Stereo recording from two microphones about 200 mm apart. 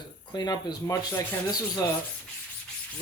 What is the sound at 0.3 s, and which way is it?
Speech, 20° left (ahead or behind).